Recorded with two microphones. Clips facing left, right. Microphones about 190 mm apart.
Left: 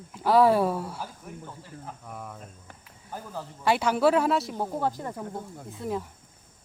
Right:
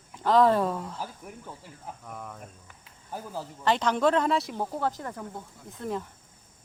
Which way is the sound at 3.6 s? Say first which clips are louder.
Left 2 dB; 10° left (ahead or behind).